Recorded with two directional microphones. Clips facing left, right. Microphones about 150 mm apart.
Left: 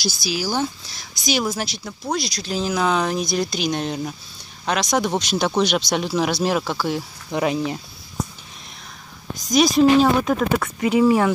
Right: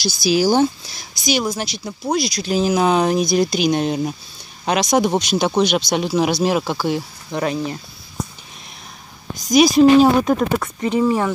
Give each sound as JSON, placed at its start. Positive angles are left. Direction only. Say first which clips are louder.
{"t": 0.2, "sound": "speech", "louder": "right 10 dB", "side_deg": -25}
{"t": 1.2, "sound": "speech", "louder": "right 2 dB", "side_deg": 0}
{"t": 1.9, "sound": "speech", "louder": "right 7 dB", "side_deg": -10}
{"t": 6.6, "sound": "speech", "louder": "right 2 dB", "side_deg": -20}
{"t": 7.2, "sound": "speech", "louder": "left 1 dB", "side_deg": 15}
{"t": 9.5, "sound": "speech", "louder": "right 4 dB", "side_deg": -5}
{"t": 10.8, "sound": "speech", "louder": "left 2 dB", "side_deg": 10}